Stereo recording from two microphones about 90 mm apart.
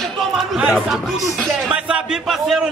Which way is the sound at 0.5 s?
10° right (ahead or behind).